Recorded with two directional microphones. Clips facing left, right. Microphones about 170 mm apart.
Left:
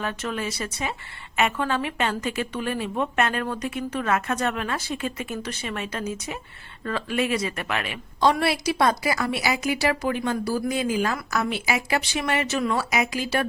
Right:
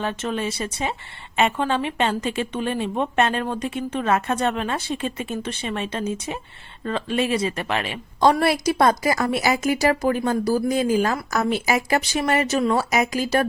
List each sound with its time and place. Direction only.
0.0 s a woman's voice: 25° right (ahead or behind)
8.2 s a woman's voice: 45° right (ahead or behind)